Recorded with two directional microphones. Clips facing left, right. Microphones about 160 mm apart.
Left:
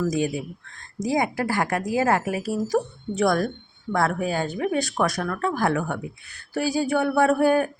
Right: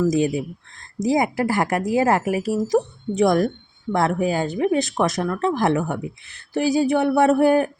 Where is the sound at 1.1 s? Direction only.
25° right (ahead or behind).